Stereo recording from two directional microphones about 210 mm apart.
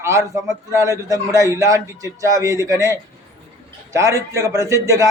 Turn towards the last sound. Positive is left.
turn(degrees=-15)  # may be behind; listen again after turning